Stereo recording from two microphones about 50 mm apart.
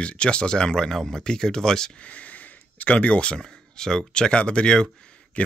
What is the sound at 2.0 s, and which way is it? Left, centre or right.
Speech, left.